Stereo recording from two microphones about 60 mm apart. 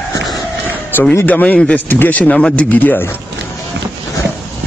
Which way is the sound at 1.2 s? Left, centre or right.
Left.